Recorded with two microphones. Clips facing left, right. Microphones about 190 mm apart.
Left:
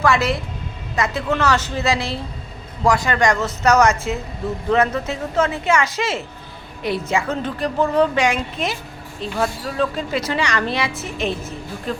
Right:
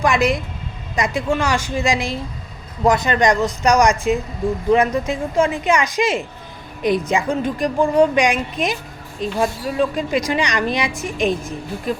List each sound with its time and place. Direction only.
0.0 s a woman's voice: 15° right (ahead or behind)